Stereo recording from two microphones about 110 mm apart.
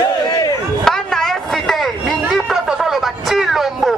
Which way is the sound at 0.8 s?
5° left (ahead or behind).